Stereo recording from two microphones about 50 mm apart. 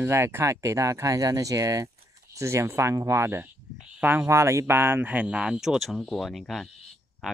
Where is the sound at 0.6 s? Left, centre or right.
Right.